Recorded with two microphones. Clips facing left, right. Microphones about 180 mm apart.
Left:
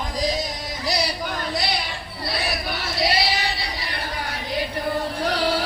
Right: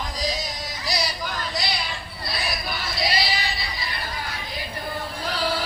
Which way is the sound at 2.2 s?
65° left (ahead or behind).